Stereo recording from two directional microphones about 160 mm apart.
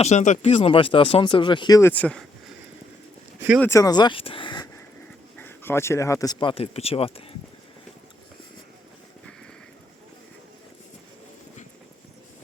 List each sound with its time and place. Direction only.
0.0 s speech: 45° left (ahead or behind); by 1.9 s 25° left (ahead or behind)
1.9 s speech: 10° left (ahead or behind)
3.6 s speech: 20° left (ahead or behind)
5.4 s speech: 15° left (ahead or behind)
6.5 s speech: 40° left (ahead or behind)